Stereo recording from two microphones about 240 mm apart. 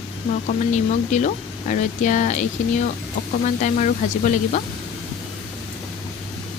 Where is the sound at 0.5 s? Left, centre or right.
Left.